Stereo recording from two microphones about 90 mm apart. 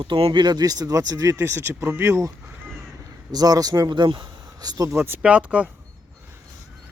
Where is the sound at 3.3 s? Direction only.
45° right (ahead or behind).